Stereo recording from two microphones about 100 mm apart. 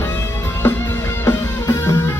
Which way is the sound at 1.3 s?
30° left (ahead or behind).